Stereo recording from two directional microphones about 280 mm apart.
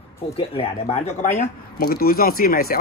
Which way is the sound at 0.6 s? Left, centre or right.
Left.